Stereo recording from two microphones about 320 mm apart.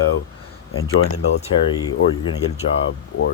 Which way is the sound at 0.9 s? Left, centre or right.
Left.